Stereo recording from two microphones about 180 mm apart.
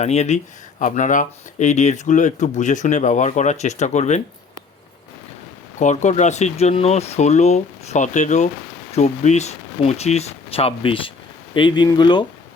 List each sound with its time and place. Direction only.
0.0 s speech: 40° left (ahead or behind)
5.8 s speech: 40° left (ahead or behind); by 12.2 s 25° left (ahead or behind)